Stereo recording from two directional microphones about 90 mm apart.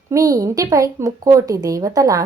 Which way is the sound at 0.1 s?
40° right (ahead or behind).